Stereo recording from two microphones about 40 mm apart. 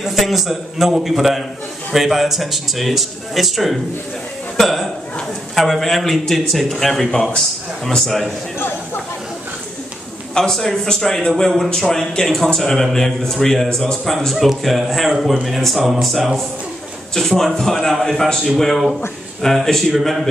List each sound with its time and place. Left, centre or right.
0.0 s speech: centre
7.1 s a man's voice: left
7.3 s a man's voice: centre
10.3 s a man's voice: centre